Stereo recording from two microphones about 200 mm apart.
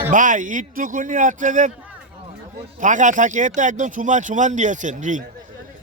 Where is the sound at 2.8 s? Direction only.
40° right (ahead or behind).